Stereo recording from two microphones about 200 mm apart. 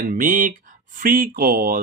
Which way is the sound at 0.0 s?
45° right (ahead or behind).